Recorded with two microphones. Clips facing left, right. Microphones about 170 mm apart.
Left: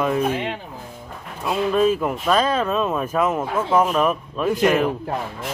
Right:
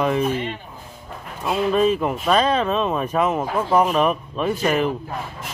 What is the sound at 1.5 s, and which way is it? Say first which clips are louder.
Speech: even; centre (ahead or behind).